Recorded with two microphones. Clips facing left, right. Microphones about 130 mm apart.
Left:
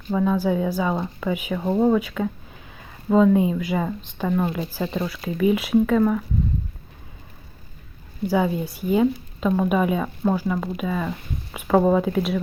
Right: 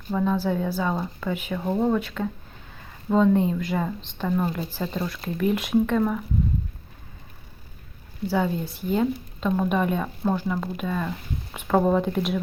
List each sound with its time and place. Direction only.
0.1 s speech: 10° left (ahead or behind)
8.3 s speech: 10° left (ahead or behind)